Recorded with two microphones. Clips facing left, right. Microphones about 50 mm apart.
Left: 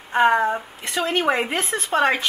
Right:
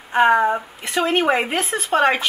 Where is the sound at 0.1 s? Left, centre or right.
Centre.